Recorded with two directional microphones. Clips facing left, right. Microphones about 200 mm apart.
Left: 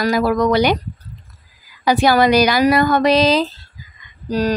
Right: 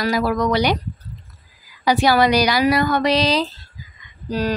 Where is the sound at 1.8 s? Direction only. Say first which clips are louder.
Left 2 dB; 50° left (ahead or behind).